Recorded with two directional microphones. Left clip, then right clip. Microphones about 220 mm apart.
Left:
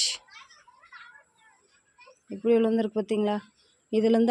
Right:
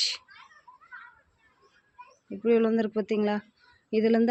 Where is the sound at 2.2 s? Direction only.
10° left (ahead or behind).